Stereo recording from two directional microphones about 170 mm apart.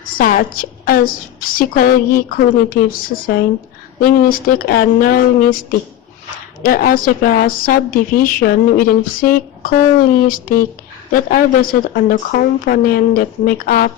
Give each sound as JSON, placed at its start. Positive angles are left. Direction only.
{"t": 0.2, "sound": "a woman's voice", "side_deg": 60}
{"t": 4.0, "sound": "a woman's voice", "side_deg": 55}
{"t": 6.6, "sound": "a woman's voice", "side_deg": 60}